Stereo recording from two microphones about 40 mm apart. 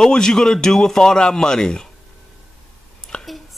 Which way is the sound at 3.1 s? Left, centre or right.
Left.